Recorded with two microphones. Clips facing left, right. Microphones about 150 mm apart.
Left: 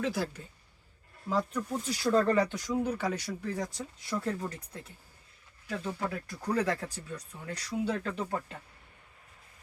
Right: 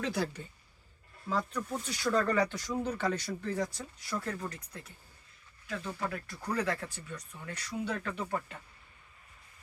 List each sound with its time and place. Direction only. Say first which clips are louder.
0.0 s speech: left 1 dB; 5° left (ahead or behind)
1.9 s speech: left 4 dB; 35° left (ahead or behind)
2.5 s speech: left 3 dB; 15° left (ahead or behind)
4.1 s speech: left 3 dB; 25° left (ahead or behind)